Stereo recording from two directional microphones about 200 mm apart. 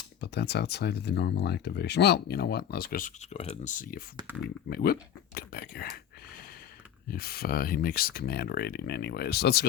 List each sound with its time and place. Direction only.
0.2 s speech: 55° left (ahead or behind)
4.3 s speech: 10° right (ahead or behind)
4.7 s speech: 50° left (ahead or behind)
7.1 s speech: 50° left (ahead or behind)